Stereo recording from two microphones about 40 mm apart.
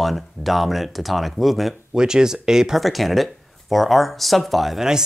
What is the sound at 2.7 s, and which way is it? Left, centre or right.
Speech, centre.